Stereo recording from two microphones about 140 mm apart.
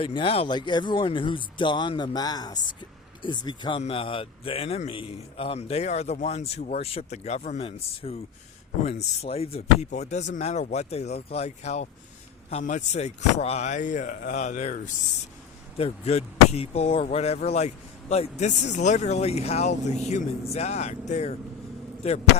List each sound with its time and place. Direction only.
0.0 s speech: 40° left (ahead or behind)
3.8 s a man's voice: 45° left (ahead or behind); by 14.8 s 60° left (ahead or behind)
15.8 s a man's voice: 45° left (ahead or behind)